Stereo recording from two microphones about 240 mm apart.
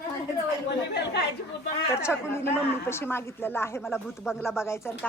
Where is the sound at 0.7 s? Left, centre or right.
Left.